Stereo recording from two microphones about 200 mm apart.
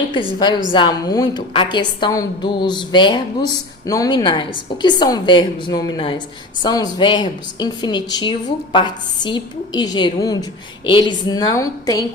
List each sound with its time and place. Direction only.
0.3 s a woman's voice: 20° left (ahead or behind)